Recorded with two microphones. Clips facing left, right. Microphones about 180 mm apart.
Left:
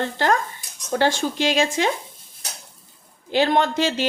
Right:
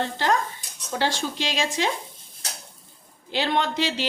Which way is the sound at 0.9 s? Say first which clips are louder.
Left 5 dB; 50° left (ahead or behind).